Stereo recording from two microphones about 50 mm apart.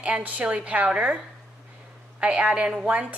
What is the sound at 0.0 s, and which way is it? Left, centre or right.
A woman's voice, right.